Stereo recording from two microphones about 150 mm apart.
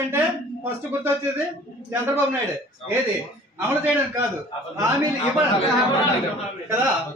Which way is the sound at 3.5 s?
15° right (ahead or behind).